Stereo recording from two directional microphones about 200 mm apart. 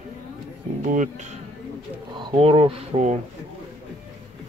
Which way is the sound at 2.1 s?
25° right (ahead or behind).